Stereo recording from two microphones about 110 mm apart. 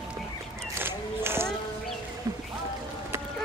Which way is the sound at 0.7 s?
20° right (ahead or behind).